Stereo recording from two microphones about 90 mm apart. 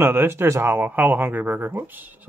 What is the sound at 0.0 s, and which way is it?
Speech, 25° right (ahead or behind).